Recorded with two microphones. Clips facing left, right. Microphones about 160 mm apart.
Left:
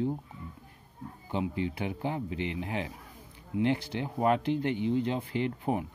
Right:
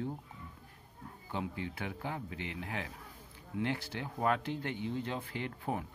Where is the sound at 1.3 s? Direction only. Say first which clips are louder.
Left 7 dB; 20° left (ahead or behind).